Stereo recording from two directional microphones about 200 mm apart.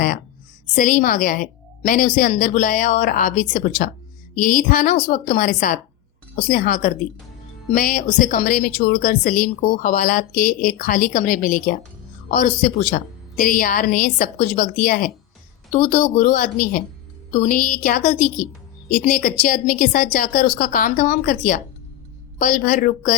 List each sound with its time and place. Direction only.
0.7 s a woman's voice: 40° left (ahead or behind)